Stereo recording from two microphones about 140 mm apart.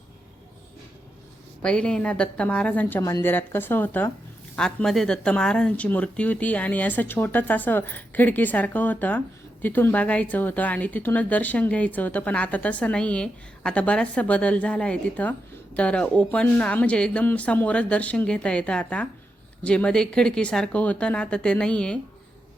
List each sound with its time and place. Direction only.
1.6 s speech: 5° left (ahead or behind)
3.0 s speech: 20° left (ahead or behind); by 21.9 s 5° left (ahead or behind)